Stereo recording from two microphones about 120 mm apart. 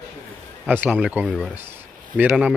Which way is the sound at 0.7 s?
15° right (ahead or behind).